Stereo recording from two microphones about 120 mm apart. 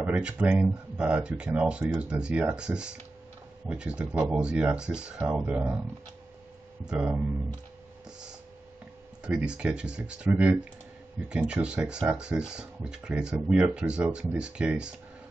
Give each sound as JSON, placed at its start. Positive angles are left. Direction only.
{"t": 0.0, "sound": "speech", "side_deg": -10}
{"t": 6.9, "sound": "speech", "side_deg": -5}
{"t": 9.2, "sound": "speech", "side_deg": -10}